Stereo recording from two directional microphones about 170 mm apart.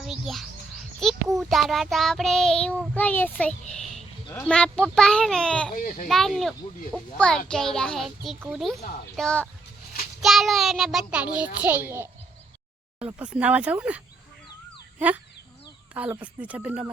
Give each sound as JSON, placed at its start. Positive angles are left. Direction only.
{"t": 0.0, "sound": "music", "side_deg": 0}
{"t": 1.0, "sound": "child singing", "side_deg": 5}
{"t": 2.9, "sound": "a child's voice", "side_deg": 10}
{"t": 4.4, "sound": "child singing", "side_deg": 5}
{"t": 5.7, "sound": "speech", "side_deg": 50}
{"t": 6.1, "sound": "child singing", "side_deg": 0}
{"t": 9.1, "sound": "child singing", "side_deg": 5}
{"t": 11.3, "sound": "speech", "side_deg": -10}
{"t": 13.1, "sound": "speech", "side_deg": -10}